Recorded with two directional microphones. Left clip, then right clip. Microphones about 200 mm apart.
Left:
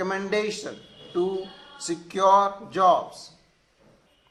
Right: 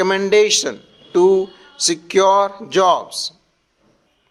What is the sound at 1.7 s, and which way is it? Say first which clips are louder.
A man's voice: right 14 dB; 50° right (ahead or behind).